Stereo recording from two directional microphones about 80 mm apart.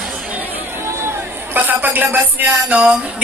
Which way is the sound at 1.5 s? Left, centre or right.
Right.